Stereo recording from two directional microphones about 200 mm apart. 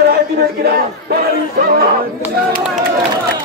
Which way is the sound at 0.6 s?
55° right (ahead or behind).